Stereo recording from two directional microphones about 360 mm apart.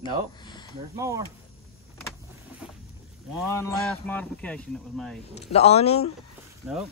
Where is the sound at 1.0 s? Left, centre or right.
Centre.